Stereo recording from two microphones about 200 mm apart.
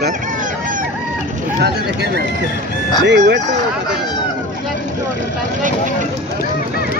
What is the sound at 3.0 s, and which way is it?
Speech, 60° right (ahead or behind).